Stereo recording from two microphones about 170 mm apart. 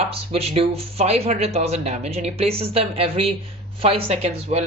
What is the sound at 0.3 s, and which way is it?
Speech, 35° right (ahead or behind).